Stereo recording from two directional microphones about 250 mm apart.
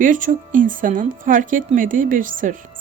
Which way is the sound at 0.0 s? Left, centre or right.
Right.